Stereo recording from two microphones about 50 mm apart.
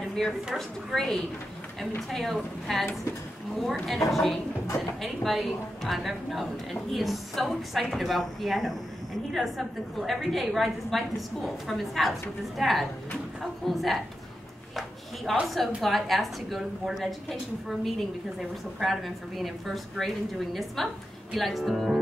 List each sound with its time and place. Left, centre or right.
0.0 s a sound: centre
0.6 s a woman's voice: centre
15.4 s a woman's voice: centre